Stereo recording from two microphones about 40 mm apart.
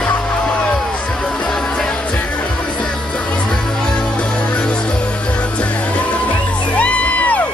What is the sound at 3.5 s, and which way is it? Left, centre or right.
Music, left.